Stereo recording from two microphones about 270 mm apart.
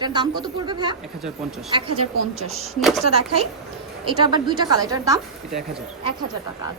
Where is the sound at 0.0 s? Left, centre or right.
Centre.